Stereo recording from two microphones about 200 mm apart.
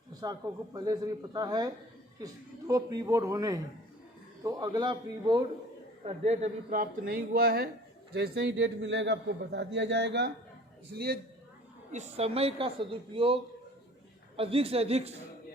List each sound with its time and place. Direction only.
0.1 s a man's voice: 20° right (ahead or behind)
6.1 s a man's voice: 35° right (ahead or behind); by 10.3 s 60° right (ahead or behind)
10.9 s speech: 50° right (ahead or behind)
11.9 s a man's voice: 35° right (ahead or behind)